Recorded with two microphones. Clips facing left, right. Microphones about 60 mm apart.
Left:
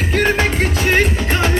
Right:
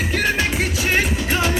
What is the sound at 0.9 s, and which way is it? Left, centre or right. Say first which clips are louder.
Music: left 4 dB; left.